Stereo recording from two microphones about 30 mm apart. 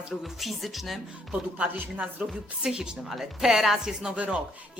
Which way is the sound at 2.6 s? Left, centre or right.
Right.